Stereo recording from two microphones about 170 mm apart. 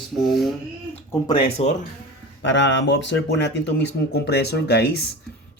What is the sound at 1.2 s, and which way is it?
Speech, 30° left (ahead or behind).